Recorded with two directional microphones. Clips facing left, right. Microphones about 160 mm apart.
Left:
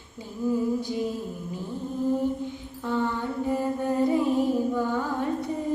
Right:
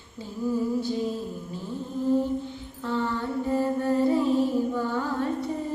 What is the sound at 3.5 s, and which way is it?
Music, 15° left (ahead or behind).